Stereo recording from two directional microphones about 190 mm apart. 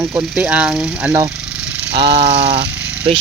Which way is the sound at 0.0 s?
10° right (ahead or behind).